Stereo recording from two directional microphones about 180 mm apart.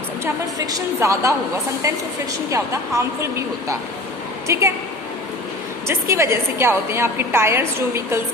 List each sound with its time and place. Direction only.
0.7 s a woman's voice: 15° right (ahead or behind)
2.5 s a woman's voice: 15° right (ahead or behind)
4.5 s a woman's voice: 15° right (ahead or behind)
5.9 s a woman's voice: 15° right (ahead or behind)